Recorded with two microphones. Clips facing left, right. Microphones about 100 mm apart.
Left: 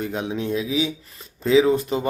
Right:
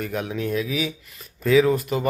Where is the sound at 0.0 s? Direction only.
25° left (ahead or behind).